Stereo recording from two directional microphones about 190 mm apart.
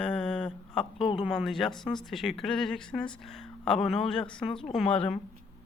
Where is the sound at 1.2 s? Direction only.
Centre (ahead or behind).